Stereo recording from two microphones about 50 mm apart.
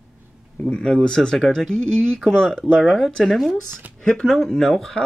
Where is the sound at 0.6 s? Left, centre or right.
Centre.